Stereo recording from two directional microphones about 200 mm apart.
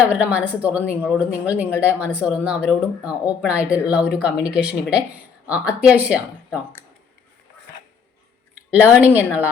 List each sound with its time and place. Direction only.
0.0 s speech: 5° right (ahead or behind)
8.7 s speech: 10° right (ahead or behind)